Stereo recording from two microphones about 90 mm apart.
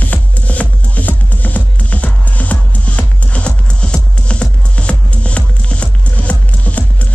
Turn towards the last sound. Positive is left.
turn(degrees=15)  # may be behind; listen again after turning